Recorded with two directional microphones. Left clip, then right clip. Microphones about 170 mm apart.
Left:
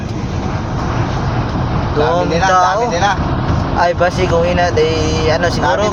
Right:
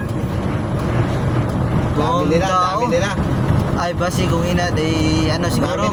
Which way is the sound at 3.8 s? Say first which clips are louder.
Left 10 dB; 25° right (ahead or behind).